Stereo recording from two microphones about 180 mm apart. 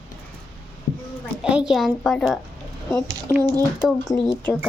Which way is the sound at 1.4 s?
5° right (ahead or behind).